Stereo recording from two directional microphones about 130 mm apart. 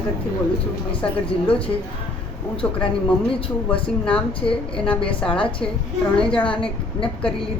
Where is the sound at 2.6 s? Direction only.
10° left (ahead or behind).